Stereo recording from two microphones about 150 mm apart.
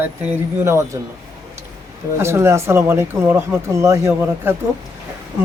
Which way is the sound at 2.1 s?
15° right (ahead or behind).